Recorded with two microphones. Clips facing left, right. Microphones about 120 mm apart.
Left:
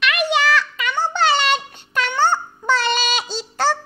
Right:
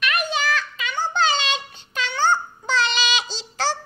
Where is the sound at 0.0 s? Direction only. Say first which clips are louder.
Left 5 dB; 70° left (ahead or behind).